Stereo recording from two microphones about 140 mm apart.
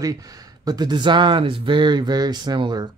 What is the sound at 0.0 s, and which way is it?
Speech, 25° right (ahead or behind).